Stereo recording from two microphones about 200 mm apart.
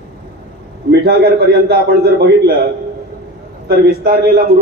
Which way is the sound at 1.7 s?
50° right (ahead or behind).